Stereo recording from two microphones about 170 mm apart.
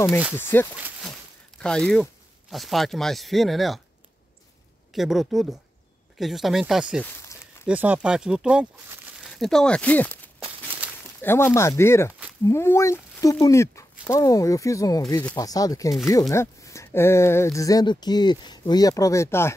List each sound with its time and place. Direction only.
0.4 s speech: 10° left (ahead or behind)
4.9 s speech: centre (ahead or behind)
7.0 s speech: 10° left (ahead or behind)
7.6 s speech: 10° right (ahead or behind); by 19.5 s 15° left (ahead or behind)